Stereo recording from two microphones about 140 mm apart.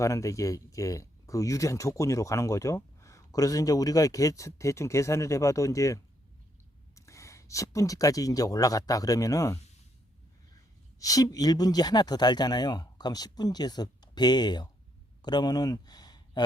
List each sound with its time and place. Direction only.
0.0 s speech: 20° left (ahead or behind)
11.0 s speech: 25° left (ahead or behind)